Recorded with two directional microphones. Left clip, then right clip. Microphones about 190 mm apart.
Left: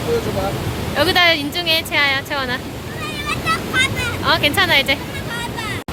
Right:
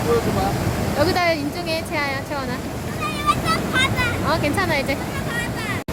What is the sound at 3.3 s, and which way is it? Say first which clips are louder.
Vehicle: left 1 dB; 70° right (ahead or behind).